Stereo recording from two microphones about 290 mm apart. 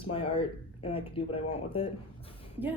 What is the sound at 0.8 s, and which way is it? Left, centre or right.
Speech, centre.